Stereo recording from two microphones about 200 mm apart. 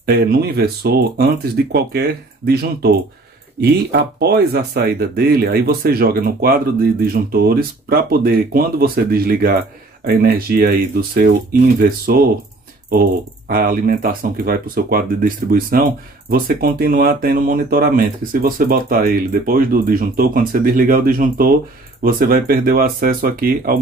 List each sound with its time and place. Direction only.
0.0 s speech: 50° right (ahead or behind)
13.5 s speech: 45° right (ahead or behind)